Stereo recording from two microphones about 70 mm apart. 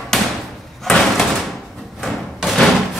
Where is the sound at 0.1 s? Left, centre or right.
Centre.